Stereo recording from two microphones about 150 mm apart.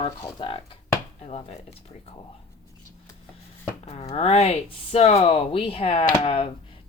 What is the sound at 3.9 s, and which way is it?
A woman's voice, 45° left (ahead or behind).